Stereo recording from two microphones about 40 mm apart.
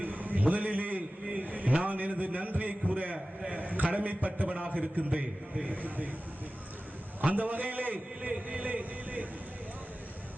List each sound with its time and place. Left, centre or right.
0.0 s a sound: right
4.5 s a man's voice: right
7.3 s a man's voice: right
8.3 s speech: right